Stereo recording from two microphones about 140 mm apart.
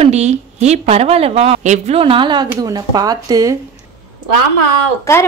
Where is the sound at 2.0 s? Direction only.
35° right (ahead or behind).